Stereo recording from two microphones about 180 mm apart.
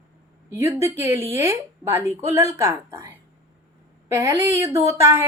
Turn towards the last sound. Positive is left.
turn(degrees=-15)  # may be behind; listen again after turning